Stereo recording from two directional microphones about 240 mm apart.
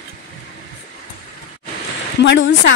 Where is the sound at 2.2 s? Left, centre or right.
Left.